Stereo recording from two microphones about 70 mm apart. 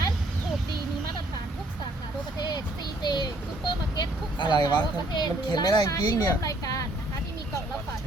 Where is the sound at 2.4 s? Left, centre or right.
Left.